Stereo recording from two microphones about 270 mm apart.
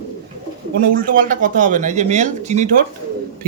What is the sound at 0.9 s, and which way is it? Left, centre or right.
Speech, right.